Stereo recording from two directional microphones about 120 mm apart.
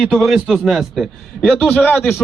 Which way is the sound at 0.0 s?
5° right (ahead or behind).